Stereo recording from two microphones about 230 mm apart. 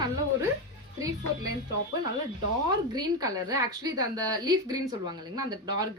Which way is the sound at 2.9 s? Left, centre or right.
Centre.